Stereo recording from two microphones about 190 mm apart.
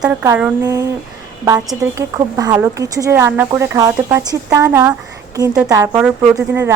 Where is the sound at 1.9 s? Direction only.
15° right (ahead or behind).